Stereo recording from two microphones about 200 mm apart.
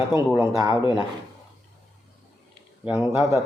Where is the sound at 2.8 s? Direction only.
5° right (ahead or behind).